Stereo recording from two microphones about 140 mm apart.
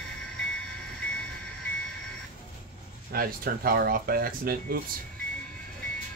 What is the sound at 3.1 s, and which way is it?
Speech, 90° right.